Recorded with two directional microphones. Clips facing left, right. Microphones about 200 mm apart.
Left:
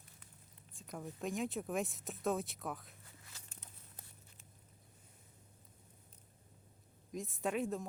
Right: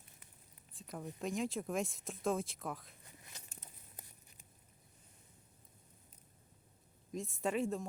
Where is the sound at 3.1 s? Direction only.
20° right (ahead or behind).